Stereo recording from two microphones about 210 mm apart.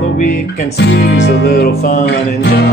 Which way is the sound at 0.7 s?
50° left (ahead or behind).